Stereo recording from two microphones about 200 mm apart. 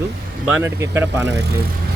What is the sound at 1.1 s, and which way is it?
Speech, 60° right (ahead or behind).